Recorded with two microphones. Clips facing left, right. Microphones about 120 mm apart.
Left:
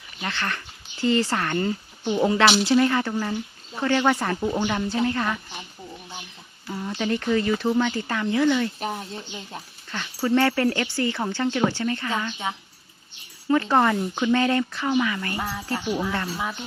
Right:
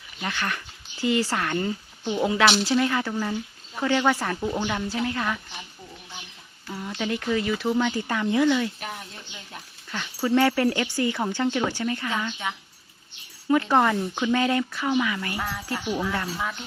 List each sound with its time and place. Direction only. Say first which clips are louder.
0.2 s speech: even; 10° right (ahead or behind)
2.0 s speech: left 3 dB; 10° left (ahead or behind)
2.3 s speech: left 2 dB; centre (ahead or behind)
6.7 s speech: left 3 dB; 5° left (ahead or behind); by 8.5 s 15° right (ahead or behind)
8.8 s speech: left 6 dB; 35° left (ahead or behind)
9.9 s a sound: left 1 dB; centre (ahead or behind)
10.3 s speech: even; 10° right (ahead or behind)
11.4 s speech: left 3 dB; centre (ahead or behind)
11.7 s speech: left 1 dB; 10° right (ahead or behind)
12.4 s speech: left 2 dB; 25° left (ahead or behind)
13.5 s speech: left 1 dB; 10° right (ahead or behind)
15.4 s speech: left 2 dB; 15° left (ahead or behind)
16.1 s speech: left 1 dB; centre (ahead or behind)